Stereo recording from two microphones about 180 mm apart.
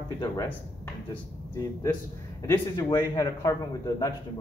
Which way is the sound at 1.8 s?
15° left (ahead or behind).